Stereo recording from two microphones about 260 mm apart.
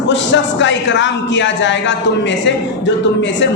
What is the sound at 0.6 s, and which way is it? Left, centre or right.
A man's voice, left.